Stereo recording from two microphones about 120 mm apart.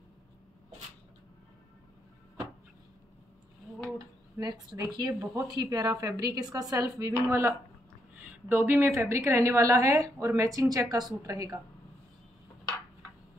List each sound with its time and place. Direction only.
4.4 s a woman's voice: 35° right (ahead or behind)